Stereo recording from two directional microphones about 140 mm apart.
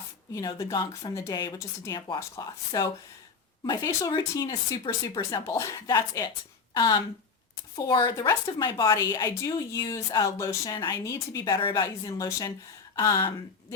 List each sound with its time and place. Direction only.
0.3 s a woman's voice: 25° left (ahead or behind)
8.3 s speech: 20° left (ahead or behind)